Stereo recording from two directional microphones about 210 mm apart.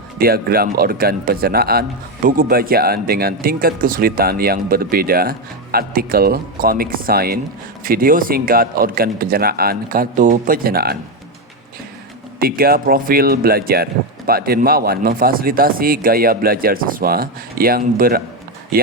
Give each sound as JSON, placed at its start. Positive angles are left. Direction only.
{"t": 0.2, "sound": "speech", "side_deg": -45}
{"t": 12.4, "sound": "speech", "side_deg": -45}